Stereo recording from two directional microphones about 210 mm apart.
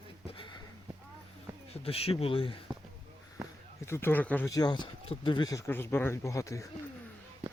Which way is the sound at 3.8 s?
10° left (ahead or behind).